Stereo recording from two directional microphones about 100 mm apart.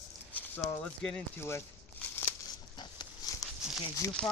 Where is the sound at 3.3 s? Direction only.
35° left (ahead or behind).